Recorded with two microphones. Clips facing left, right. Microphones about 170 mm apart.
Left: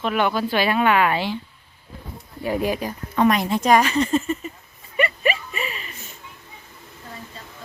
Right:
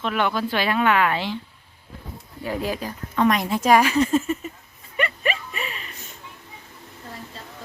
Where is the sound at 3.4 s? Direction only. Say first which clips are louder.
Even; 5° right (ahead or behind).